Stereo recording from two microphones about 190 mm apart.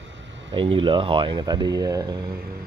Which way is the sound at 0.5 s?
25° right (ahead or behind).